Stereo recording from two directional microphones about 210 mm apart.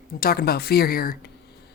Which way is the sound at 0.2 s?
45° left (ahead or behind).